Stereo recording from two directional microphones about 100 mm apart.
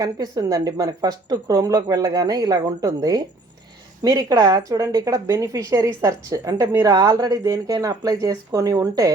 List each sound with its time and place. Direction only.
0.0 s speech: 40° right (ahead or behind)